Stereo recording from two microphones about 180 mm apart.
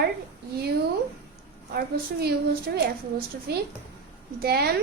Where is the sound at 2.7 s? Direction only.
70° right (ahead or behind).